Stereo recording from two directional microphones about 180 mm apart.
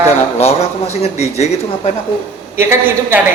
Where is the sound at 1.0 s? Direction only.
35° left (ahead or behind).